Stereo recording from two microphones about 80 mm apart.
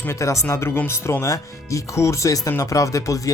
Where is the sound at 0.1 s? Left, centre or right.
Left.